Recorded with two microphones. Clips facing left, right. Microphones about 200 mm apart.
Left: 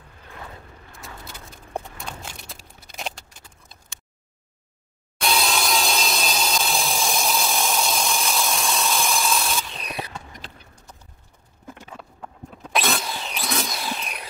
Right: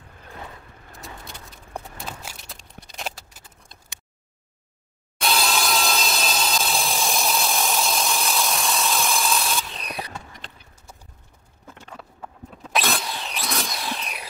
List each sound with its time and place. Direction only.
2.0 s a sound: 5° right (ahead or behind)
5.2 s sawing: centre (ahead or behind)
12.0 s vehicle: centre (ahead or behind)